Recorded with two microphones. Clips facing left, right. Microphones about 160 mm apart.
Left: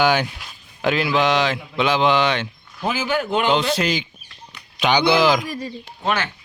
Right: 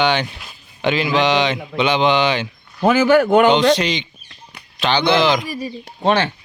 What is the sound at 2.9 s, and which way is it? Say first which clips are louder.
Speech: right 10 dB; 45° right (ahead or behind).